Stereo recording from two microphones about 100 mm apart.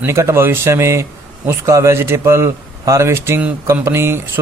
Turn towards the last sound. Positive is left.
turn(degrees=-25)  # may be behind; listen again after turning